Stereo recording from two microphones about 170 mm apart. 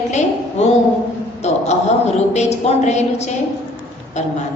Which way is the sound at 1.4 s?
40° left (ahead or behind).